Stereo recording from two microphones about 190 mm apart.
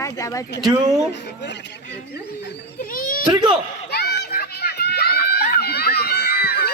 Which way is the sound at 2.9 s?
45° left (ahead or behind).